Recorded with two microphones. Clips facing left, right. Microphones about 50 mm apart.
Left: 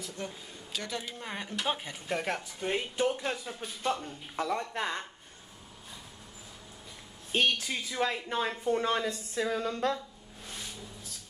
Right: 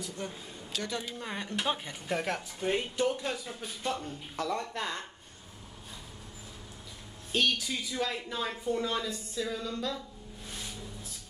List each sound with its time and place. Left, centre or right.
0.7 s speech: centre
3.0 s speech: left
7.3 s speech: left